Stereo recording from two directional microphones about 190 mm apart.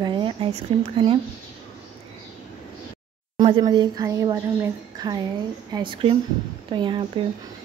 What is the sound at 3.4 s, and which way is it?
A woman's voice, 20° right (ahead or behind).